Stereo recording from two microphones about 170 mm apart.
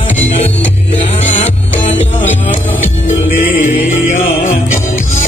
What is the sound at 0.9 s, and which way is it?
Music, 35° left (ahead or behind).